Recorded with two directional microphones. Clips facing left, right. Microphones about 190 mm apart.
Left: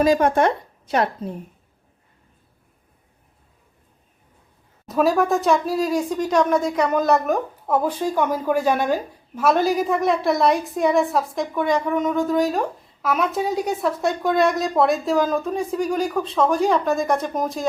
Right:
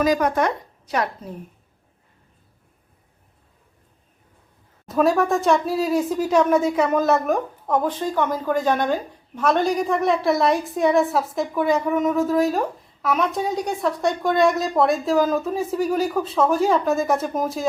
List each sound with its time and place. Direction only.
0.0 s a woman's voice: 30° left (ahead or behind)
4.9 s speech: centre (ahead or behind)